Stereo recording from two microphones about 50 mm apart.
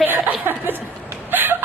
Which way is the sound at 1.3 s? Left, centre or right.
Right.